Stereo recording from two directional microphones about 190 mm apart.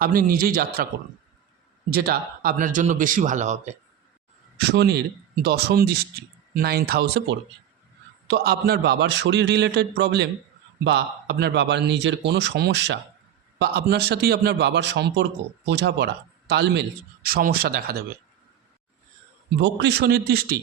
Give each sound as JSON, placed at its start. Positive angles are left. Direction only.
{"t": 0.0, "sound": "speech", "side_deg": -50}
{"t": 1.9, "sound": "speech", "side_deg": -50}
{"t": 4.5, "sound": "a man's voice", "side_deg": -60}
{"t": 17.2, "sound": "speech", "side_deg": -50}
{"t": 19.5, "sound": "a man's voice", "side_deg": -60}